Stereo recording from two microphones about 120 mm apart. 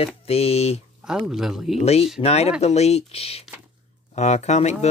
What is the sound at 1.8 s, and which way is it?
Speech, 60° left (ahead or behind).